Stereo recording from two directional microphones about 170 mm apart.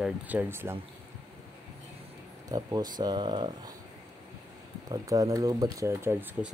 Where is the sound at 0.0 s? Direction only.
10° right (ahead or behind).